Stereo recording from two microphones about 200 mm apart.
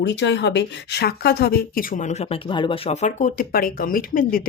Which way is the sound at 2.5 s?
25° left (ahead or behind).